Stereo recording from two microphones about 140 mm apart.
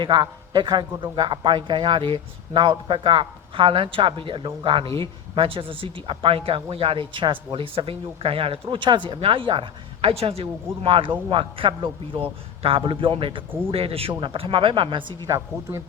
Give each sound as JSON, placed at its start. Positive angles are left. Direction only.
{"t": 0.0, "sound": "a man's voice", "side_deg": -35}